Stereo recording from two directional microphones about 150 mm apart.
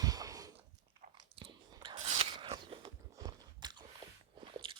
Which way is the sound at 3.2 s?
25° right (ahead or behind).